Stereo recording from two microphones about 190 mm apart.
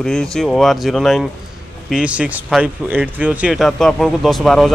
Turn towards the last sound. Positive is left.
turn(degrees=0)  # may be behind; listen again after turning